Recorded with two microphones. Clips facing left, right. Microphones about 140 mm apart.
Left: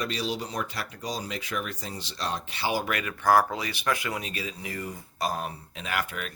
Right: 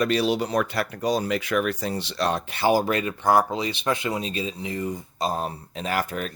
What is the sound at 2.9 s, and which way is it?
Speech, 25° right (ahead or behind).